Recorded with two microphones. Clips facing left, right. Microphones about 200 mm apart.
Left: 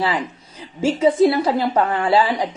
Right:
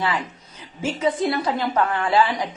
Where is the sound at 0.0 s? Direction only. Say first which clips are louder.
Left 3 dB; 30° left (ahead or behind).